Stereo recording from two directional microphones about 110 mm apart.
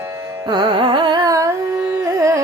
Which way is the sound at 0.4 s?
40° right (ahead or behind).